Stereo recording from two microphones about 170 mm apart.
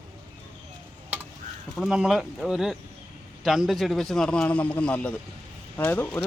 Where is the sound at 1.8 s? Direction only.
5° right (ahead or behind).